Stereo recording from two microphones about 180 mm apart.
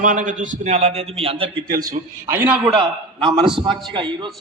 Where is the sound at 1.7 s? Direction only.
15° right (ahead or behind); by 3.8 s centre (ahead or behind).